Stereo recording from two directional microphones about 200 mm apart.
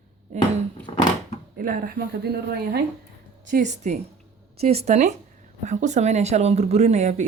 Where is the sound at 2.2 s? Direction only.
50° right (ahead or behind).